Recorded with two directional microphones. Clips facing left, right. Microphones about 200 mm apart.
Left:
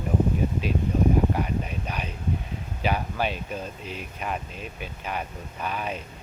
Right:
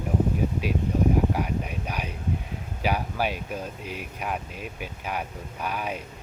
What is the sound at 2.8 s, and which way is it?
Speech, 10° right (ahead or behind).